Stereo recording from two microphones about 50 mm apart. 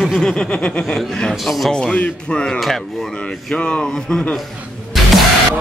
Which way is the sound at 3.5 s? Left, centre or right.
Centre.